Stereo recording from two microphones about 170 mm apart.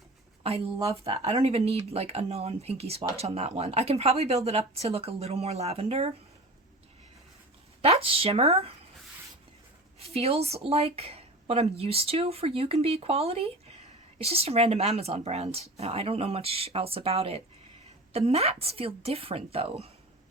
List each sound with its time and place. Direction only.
0.4 s speech: 35° right (ahead or behind)
7.8 s speech: 35° right (ahead or behind)
10.0 s speech: 35° right (ahead or behind)